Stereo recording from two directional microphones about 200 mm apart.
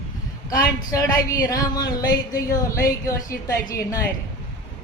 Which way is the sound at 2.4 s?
40° left (ahead or behind).